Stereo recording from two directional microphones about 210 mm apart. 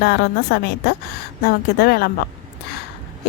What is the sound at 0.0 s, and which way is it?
Speech, 50° left (ahead or behind).